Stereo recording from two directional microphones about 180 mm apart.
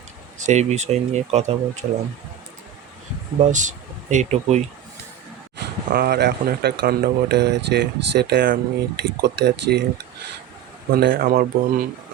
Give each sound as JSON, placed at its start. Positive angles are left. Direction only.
{"t": 0.3, "sound": "speech", "side_deg": -40}
{"t": 3.5, "sound": "speech", "side_deg": -45}
{"t": 5.5, "sound": "speech", "side_deg": -60}
{"t": 10.9, "sound": "speech", "side_deg": -55}